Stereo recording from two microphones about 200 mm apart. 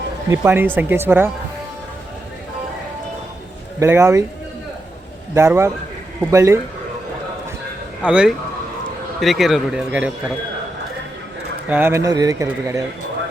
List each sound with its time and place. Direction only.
0.3 s speech: 10° right (ahead or behind)
3.8 s speech: 15° right (ahead or behind)
5.3 s speech: 15° right (ahead or behind)
8.0 s speech: 5° right (ahead or behind)
11.7 s speech: 10° right (ahead or behind)